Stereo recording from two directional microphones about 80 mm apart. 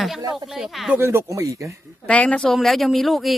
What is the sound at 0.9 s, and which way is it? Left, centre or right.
Speech, right.